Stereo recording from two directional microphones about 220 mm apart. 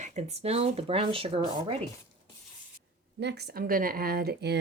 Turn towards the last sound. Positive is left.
turn(degrees=-50)  # may be behind; listen again after turning